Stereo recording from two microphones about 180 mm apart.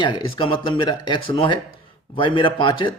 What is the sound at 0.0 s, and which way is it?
A man's voice, 25° left (ahead or behind).